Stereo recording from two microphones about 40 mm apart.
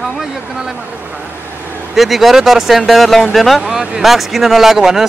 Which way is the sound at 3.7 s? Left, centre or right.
Centre.